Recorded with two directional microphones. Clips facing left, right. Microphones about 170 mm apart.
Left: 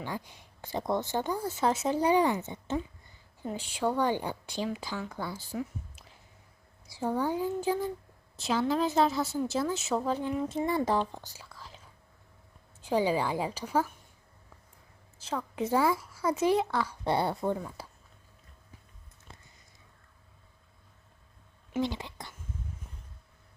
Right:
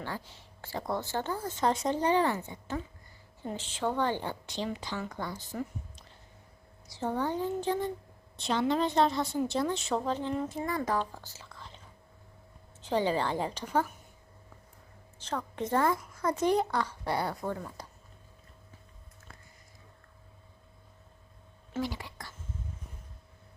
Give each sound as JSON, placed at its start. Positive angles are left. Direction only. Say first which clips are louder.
{"t": 0.0, "sound": "speech", "louder": "left 1 dB", "side_deg": 15}
{"t": 3.4, "sound": "a woman's voice", "louder": "left 2 dB", "side_deg": 10}
{"t": 10.5, "sound": "speech", "louder": "left 3 dB", "side_deg": 25}
{"t": 12.8, "sound": "speech", "louder": "left 1 dB", "side_deg": 10}
{"t": 15.2, "sound": "speech", "louder": "left 2 dB", "side_deg": 10}
{"t": 16.9, "sound": "speech", "louder": "left 3 dB", "side_deg": 25}
{"t": 17.8, "sound": "a sound", "louder": "left 1 dB", "side_deg": 5}
{"t": 21.8, "sound": "a woman's voice", "louder": "left 3 dB", "side_deg": 25}